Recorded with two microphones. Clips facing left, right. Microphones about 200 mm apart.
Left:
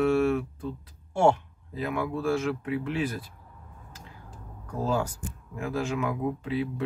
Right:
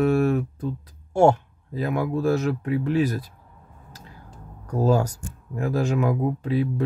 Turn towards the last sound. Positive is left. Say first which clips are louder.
# right 6 dB
turn(degrees=-40)  # may be behind; listen again after turning